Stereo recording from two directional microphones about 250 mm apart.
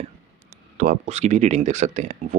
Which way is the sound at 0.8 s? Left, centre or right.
Right.